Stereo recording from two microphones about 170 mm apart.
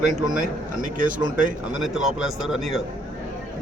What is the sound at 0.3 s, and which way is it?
Speech, 50° right (ahead or behind).